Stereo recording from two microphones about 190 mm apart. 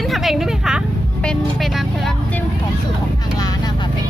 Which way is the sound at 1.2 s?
Centre (ahead or behind).